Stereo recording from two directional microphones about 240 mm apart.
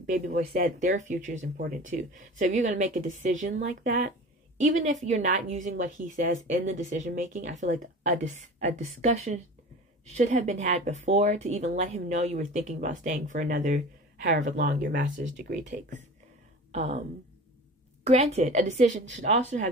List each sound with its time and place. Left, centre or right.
0.0 s speech: right
16.7 s speech: right
18.0 s speech: right